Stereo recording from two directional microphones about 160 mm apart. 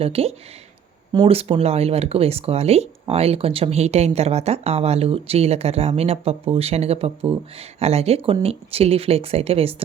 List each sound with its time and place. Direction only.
0.0 s speech: 40° right (ahead or behind)